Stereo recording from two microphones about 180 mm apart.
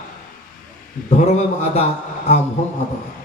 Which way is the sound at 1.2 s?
40° left (ahead or behind).